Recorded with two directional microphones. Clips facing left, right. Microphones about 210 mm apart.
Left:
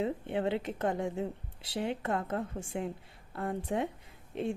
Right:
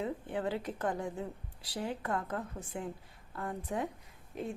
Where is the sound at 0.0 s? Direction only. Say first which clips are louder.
Left 4 dB; 25° left (ahead or behind).